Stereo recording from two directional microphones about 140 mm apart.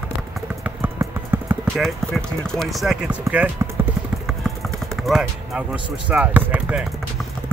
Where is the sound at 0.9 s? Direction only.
15° right (ahead or behind).